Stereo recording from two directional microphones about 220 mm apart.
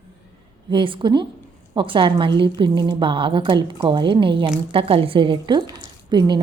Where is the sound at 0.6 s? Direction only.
20° right (ahead or behind).